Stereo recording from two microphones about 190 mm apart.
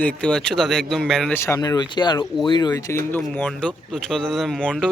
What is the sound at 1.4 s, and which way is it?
Speech, 15° left (ahead or behind).